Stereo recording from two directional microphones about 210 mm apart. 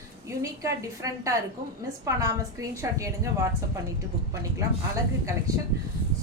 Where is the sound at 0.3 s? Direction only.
15° right (ahead or behind).